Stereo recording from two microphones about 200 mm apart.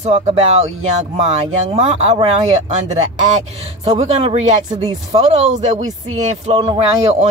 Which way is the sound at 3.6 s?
30° right (ahead or behind).